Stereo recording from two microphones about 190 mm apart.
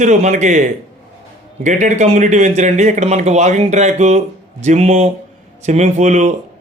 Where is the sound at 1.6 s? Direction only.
40° right (ahead or behind).